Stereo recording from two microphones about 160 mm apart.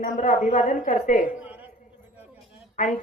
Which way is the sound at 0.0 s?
50° left (ahead or behind).